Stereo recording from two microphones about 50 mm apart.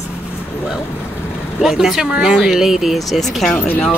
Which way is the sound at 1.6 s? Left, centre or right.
Centre.